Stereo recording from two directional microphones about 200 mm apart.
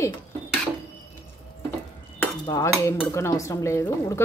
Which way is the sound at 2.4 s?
20° left (ahead or behind).